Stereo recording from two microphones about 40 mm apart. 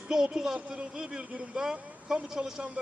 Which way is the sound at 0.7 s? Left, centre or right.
Right.